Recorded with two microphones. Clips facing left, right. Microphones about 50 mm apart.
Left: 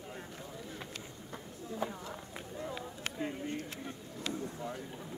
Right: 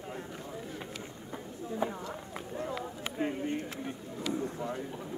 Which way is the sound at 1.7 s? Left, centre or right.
Right.